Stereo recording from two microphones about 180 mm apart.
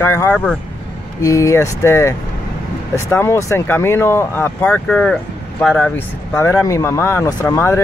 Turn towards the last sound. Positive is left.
turn(degrees=15)  # may be behind; listen again after turning